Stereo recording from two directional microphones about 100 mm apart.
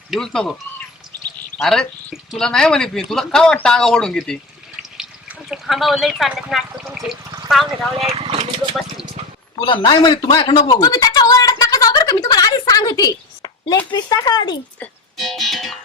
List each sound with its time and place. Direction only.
0.1 s speech: 5° left (ahead or behind)
1.5 s speech: 5° left (ahead or behind)
7.9 s speech: 75° right (ahead or behind)
9.6 s speech: 50° left (ahead or behind)
10.8 s a sound: 35° left (ahead or behind)
13.9 s speech: 40° left (ahead or behind)
15.2 s music: centre (ahead or behind)